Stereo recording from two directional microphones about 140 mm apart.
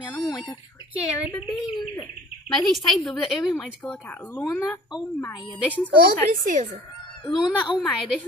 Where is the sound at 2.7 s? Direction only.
5° left (ahead or behind).